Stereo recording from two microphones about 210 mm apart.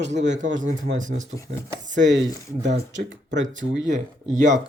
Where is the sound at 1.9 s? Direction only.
60° right (ahead or behind).